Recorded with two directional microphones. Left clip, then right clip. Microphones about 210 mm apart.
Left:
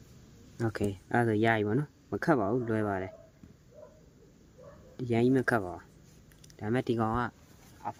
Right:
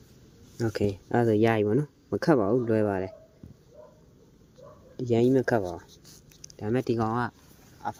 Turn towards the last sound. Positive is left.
turn(degrees=-25)  # may be behind; listen again after turning